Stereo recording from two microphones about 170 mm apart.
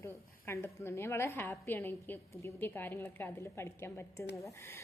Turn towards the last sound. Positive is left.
turn(degrees=15)  # may be behind; listen again after turning